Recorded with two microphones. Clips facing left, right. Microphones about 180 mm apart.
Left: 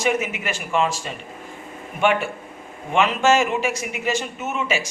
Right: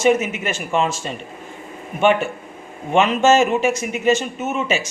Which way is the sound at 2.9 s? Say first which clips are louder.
Right 3 dB; 25° right (ahead or behind).